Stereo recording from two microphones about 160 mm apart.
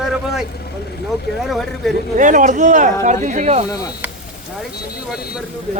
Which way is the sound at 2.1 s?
55° right (ahead or behind).